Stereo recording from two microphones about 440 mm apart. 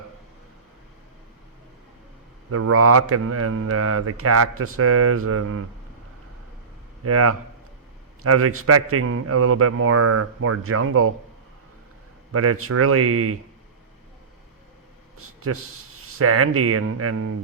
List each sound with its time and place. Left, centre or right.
2.5 s speech: right
7.0 s speech: right
12.3 s speech: right
16.1 s speech: right